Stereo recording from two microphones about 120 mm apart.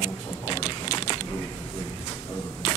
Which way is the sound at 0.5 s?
40° left (ahead or behind).